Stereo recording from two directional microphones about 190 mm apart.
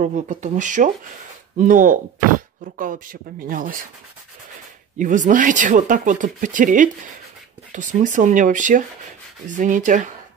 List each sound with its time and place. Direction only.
0.0 s speech: 40° right (ahead or behind)
4.9 s speech: 40° right (ahead or behind)